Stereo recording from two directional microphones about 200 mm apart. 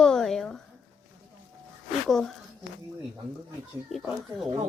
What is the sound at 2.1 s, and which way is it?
Speech, centre (ahead or behind).